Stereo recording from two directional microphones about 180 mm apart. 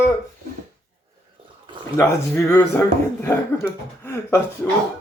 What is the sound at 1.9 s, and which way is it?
Speech, 15° left (ahead or behind).